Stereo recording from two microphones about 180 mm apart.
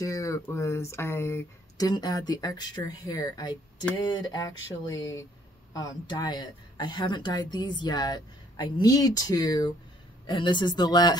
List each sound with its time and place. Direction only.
0.0 s speech: 20° left (ahead or behind)
5.7 s speech: 20° left (ahead or behind)